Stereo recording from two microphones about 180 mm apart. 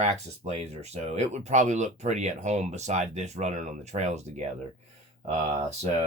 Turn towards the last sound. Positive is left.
turn(degrees=-35)  # may be behind; listen again after turning